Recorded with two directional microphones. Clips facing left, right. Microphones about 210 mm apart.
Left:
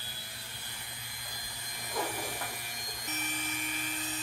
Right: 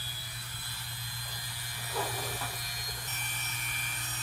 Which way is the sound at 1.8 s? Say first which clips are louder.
Left 1 dB; 20° left (ahead or behind).